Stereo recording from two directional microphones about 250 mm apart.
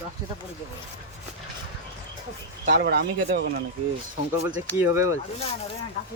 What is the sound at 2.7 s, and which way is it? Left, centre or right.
Speech, right.